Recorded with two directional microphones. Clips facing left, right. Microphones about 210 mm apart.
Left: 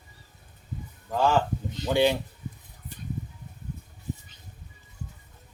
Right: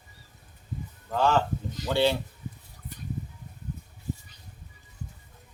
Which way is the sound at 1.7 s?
25° left (ahead or behind).